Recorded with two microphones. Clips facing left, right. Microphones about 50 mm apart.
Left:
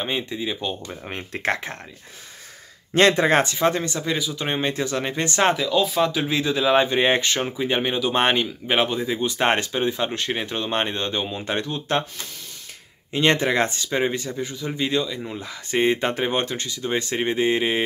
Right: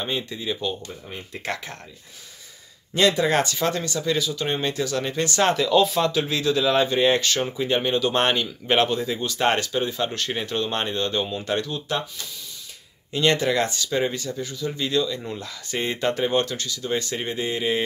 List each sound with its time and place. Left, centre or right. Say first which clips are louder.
0.0 s speech: left 2 dB; left
1.0 s speech: left 5 dB; left
1.5 s speech: left 5 dB; left
2.9 s speech: left 3 dB; left
5.6 s speech: right 1 dB; centre
6.0 s speech: even; centre
8.6 s speech: right 2 dB; centre; by 11.8 s left
13.1 s speech: left 1 dB; left
15.0 s speech: even; centre
15.7 s speech: left 4 dB; left